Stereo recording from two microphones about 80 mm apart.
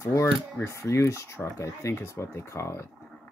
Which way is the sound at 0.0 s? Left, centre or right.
Left.